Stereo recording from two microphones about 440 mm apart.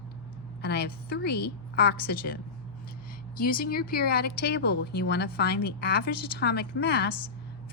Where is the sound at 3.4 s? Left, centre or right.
Centre.